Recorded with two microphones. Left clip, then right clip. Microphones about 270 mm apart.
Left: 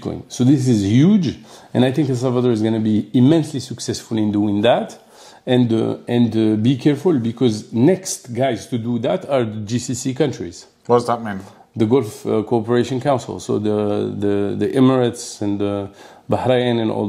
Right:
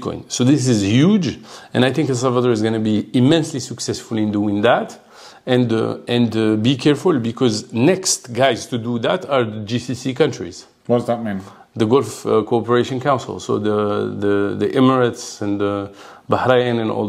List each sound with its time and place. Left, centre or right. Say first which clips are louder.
0.0 s speech: right 1 dB; right
10.9 s speech: left 2 dB; left
11.7 s speech: right 1 dB; right